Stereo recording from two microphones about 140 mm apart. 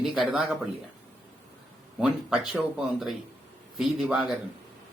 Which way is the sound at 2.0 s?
5° right (ahead or behind).